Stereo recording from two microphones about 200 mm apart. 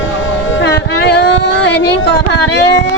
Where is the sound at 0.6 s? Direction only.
55° left (ahead or behind).